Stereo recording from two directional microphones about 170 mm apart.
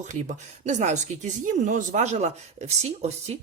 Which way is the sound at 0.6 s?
45° right (ahead or behind).